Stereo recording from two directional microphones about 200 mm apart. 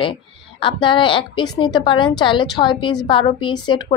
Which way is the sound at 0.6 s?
25° left (ahead or behind).